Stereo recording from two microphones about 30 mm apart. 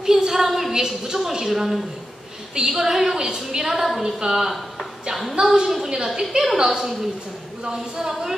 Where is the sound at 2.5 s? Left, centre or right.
Centre.